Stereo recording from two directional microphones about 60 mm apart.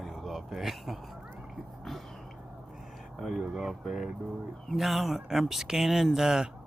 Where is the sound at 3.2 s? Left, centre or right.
Centre.